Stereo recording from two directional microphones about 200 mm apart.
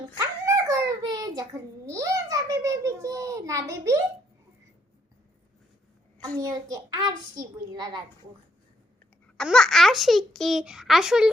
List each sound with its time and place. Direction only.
0.2 s a sound: 15° right (ahead or behind)
6.4 s a child's voice: 20° right (ahead or behind)
9.2 s a child's voice: centre (ahead or behind)